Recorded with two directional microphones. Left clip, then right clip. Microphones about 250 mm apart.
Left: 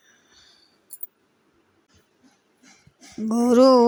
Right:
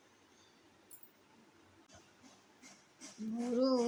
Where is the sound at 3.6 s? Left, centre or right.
Left.